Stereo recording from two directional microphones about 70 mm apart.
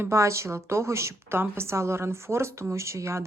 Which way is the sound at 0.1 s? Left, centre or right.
Right.